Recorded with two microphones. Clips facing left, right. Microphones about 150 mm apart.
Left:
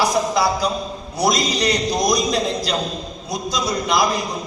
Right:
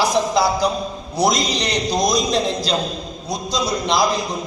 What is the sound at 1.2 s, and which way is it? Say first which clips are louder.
A man's voice: even; 20° right (ahead or behind).